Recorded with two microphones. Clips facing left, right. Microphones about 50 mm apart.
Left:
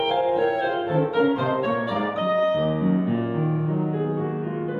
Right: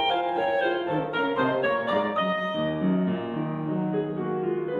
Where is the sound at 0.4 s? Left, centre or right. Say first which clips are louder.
Left 2 dB; right.